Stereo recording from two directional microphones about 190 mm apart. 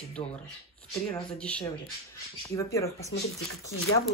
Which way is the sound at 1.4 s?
5° left (ahead or behind).